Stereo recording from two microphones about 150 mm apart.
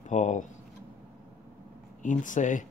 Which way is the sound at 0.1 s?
55° left (ahead or behind).